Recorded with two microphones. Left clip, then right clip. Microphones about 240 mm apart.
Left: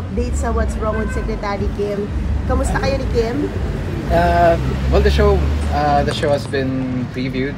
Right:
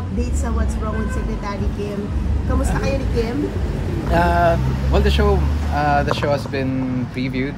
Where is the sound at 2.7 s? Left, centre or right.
Centre.